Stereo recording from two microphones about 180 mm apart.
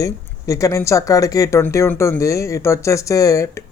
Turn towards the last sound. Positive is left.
turn(degrees=15)  # may be behind; listen again after turning